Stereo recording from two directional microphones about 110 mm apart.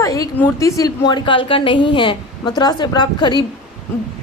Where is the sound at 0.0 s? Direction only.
30° left (ahead or behind).